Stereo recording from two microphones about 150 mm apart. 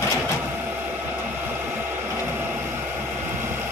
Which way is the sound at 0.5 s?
15° right (ahead or behind).